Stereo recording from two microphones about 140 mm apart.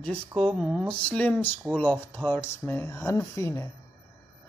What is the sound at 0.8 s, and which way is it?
A man's voice, 10° left (ahead or behind).